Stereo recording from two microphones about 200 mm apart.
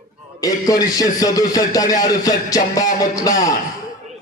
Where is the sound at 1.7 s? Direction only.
20° left (ahead or behind).